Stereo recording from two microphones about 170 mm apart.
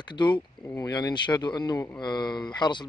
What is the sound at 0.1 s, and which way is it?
Speech, 25° left (ahead or behind).